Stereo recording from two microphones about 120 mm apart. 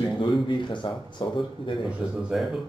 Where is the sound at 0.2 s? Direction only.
40° left (ahead or behind).